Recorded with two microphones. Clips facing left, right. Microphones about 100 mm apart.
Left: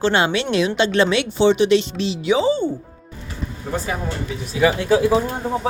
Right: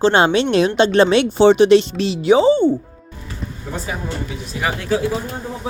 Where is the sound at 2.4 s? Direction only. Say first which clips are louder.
Right 6 dB; 25° right (ahead or behind).